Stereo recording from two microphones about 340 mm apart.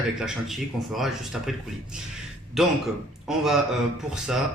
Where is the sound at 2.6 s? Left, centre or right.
Centre.